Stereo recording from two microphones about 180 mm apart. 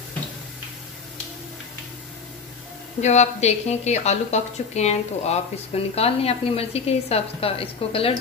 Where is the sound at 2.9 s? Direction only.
40° left (ahead or behind).